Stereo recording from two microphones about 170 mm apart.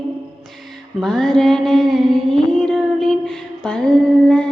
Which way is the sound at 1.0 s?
Centre (ahead or behind).